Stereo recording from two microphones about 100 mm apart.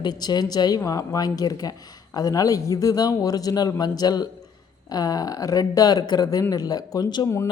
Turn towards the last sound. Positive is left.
turn(degrees=45)  # may be behind; listen again after turning